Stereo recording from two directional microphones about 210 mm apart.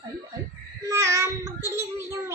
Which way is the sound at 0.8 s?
15° right (ahead or behind).